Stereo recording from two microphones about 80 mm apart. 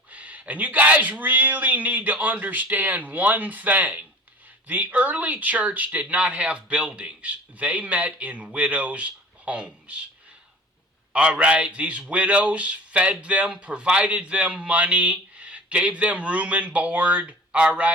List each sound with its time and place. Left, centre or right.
0.1 s a man's voice: centre
11.1 s a man's voice: centre